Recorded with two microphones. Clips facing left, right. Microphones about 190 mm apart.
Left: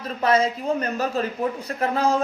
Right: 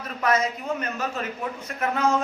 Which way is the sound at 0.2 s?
30° left (ahead or behind).